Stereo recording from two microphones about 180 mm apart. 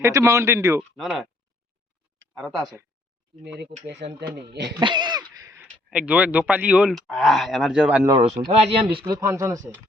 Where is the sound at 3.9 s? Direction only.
70° right (ahead or behind).